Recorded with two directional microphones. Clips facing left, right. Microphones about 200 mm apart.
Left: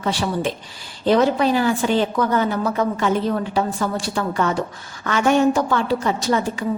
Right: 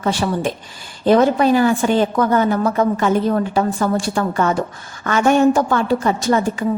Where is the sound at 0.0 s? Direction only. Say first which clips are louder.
Right 3 dB; 50° right (ahead or behind).